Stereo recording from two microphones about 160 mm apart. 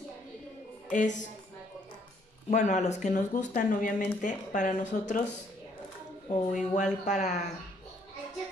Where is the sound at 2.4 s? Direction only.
50° left (ahead or behind).